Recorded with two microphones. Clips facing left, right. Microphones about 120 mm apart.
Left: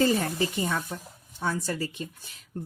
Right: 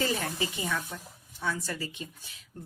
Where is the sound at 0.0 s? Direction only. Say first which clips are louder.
Left 6 dB; 40° left (ahead or behind).